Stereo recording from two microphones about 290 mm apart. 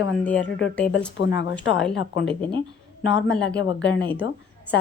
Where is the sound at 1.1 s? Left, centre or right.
Left.